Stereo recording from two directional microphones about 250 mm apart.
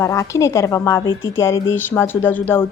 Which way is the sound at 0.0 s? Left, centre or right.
Centre.